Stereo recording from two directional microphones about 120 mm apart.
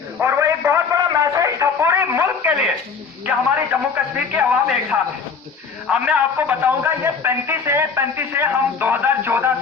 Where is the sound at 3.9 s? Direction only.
15° right (ahead or behind).